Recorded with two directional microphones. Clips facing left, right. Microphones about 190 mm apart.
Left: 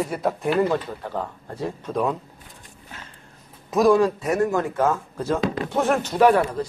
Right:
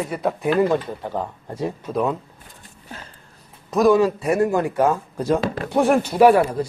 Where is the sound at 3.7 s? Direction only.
Centre (ahead or behind).